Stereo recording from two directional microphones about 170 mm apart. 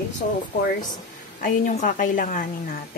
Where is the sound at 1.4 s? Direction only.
55° left (ahead or behind).